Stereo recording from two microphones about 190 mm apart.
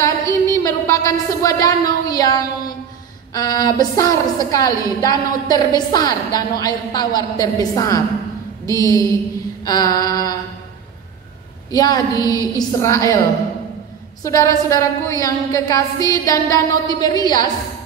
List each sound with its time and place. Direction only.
0.0 s a sound: 15° left (ahead or behind)
3.3 s a woman's voice: 20° left (ahead or behind)
11.7 s a woman's voice: 20° left (ahead or behind)
14.2 s a woman's voice: 15° left (ahead or behind)